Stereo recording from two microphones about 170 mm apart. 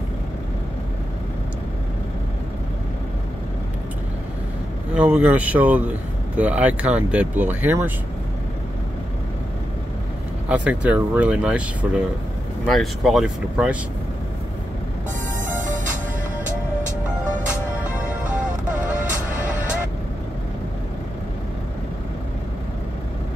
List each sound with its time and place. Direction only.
4.9 s speech: 10° right (ahead or behind)
10.5 s speech: 5° right (ahead or behind)
15.4 s music: 50° right (ahead or behind)
17.5 s music: 10° right (ahead or behind)